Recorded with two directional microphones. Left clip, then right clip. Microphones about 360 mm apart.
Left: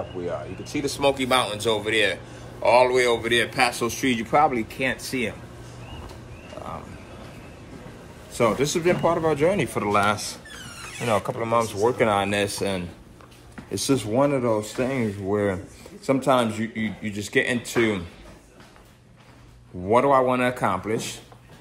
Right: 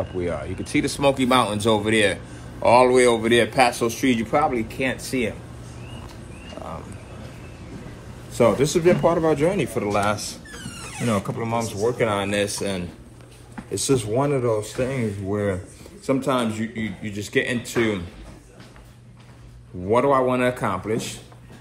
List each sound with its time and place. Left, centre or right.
0.7 s a man's voice: right; by 5.3 s centre
8.4 s speech: centre
19.9 s speech: centre